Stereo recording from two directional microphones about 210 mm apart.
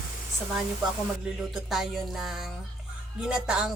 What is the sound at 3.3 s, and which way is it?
Speech, 5° right (ahead or behind).